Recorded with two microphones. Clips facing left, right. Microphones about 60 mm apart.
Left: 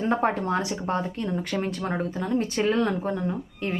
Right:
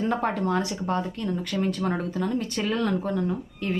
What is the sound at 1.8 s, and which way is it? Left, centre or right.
Speech, centre.